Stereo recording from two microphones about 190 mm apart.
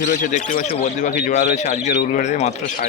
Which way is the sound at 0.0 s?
45° left (ahead or behind).